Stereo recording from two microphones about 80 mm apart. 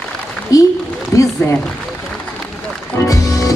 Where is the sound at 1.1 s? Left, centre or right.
Left.